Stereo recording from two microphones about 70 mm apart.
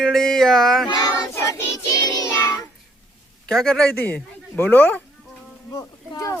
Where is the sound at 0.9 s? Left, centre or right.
Left.